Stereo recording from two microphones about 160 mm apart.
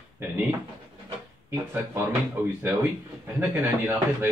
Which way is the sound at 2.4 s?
15° right (ahead or behind).